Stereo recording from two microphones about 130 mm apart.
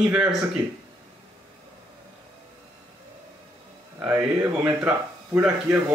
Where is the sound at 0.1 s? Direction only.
5° right (ahead or behind).